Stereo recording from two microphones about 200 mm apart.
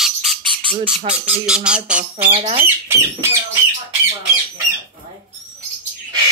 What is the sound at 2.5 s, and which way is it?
Speech, 10° right (ahead or behind).